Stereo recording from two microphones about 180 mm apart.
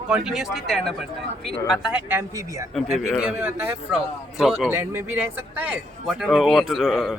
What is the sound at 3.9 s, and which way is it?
Speech, centre (ahead or behind).